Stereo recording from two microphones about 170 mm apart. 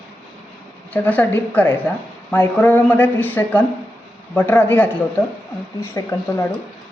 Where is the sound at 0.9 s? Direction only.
10° left (ahead or behind).